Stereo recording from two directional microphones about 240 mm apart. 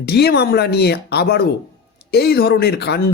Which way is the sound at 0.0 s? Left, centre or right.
Left.